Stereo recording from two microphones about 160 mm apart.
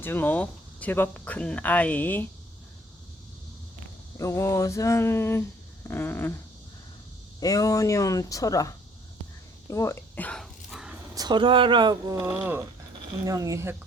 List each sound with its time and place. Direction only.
0.0 s speech: 10° left (ahead or behind)
4.2 s speech: 20° left (ahead or behind)
7.3 s speech: 20° left (ahead or behind)
9.6 s whispering: 20° left (ahead or behind); by 10.9 s centre (ahead or behind)
11.1 s speech: 25° right (ahead or behind)
12.3 s speech: 10° right (ahead or behind)